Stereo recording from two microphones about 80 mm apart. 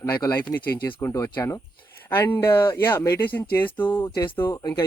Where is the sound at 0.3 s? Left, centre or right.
Left.